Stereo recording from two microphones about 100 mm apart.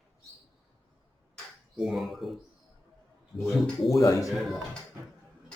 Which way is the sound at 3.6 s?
Centre (ahead or behind).